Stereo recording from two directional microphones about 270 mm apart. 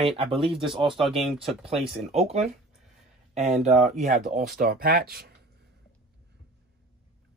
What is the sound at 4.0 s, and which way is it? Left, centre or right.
Speech, right.